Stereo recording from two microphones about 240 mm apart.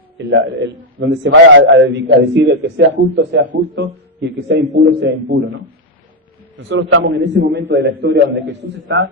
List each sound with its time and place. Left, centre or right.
0.2 s a man's voice: right
6.7 s a man's voice: right